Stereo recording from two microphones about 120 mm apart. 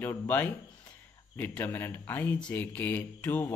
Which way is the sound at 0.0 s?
15° left (ahead or behind).